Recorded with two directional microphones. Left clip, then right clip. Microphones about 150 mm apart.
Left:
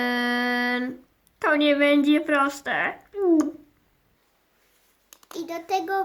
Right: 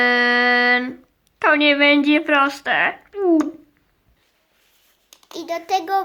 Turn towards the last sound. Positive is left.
turn(degrees=-40)  # may be behind; listen again after turning